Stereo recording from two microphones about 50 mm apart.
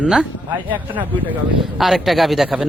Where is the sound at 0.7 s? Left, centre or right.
Right.